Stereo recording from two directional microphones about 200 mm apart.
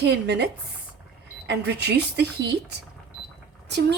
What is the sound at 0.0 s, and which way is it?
A woman's voice, 55° right (ahead or behind).